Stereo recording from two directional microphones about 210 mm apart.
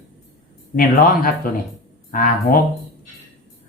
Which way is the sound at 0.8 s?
45° left (ahead or behind).